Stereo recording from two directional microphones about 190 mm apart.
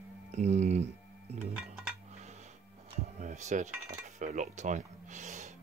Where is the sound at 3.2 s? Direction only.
40° right (ahead or behind).